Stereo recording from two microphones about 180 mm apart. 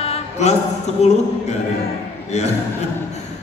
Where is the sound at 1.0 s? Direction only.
35° left (ahead or behind).